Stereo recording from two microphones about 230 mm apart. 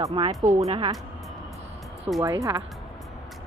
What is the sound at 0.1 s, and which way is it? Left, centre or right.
Speech, right.